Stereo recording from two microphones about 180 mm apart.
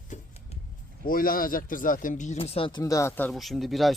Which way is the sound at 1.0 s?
55° left (ahead or behind).